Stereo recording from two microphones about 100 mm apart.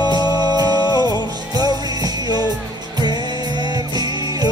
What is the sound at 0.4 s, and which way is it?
Music, 40° right (ahead or behind).